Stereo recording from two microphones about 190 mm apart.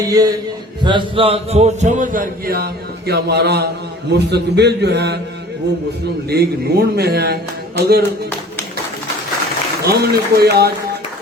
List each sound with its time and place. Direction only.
0.1 s a man's voice: 20° right (ahead or behind); by 5.2 s 65° right (ahead or behind)
6.3 s a man's voice: 55° right (ahead or behind)
9.8 s a man's voice: 55° right (ahead or behind)